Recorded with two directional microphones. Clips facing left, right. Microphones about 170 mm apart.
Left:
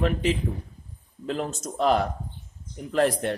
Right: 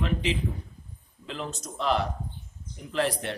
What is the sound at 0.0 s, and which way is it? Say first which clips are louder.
A man's voice: left 4 dB; 45° left (ahead or behind).